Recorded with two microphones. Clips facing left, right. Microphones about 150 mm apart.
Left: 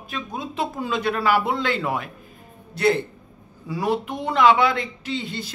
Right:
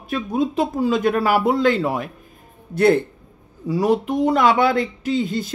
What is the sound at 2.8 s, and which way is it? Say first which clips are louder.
Speech: right 5 dB; 50° right (ahead or behind).